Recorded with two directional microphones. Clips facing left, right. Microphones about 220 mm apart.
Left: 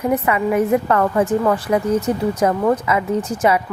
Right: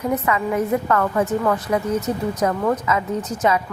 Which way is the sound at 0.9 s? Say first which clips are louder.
Left 3 dB; 30° left (ahead or behind).